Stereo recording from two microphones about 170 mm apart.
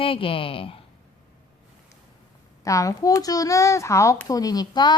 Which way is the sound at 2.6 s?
20° left (ahead or behind).